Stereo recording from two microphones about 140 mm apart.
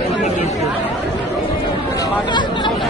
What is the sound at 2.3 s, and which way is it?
Chatter, 35° left (ahead or behind).